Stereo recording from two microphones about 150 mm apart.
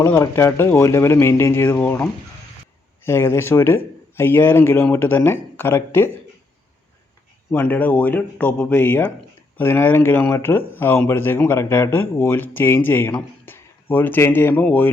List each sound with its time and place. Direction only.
0.1 s speech: 20° left (ahead or behind)
7.5 s speech: 10° left (ahead or behind)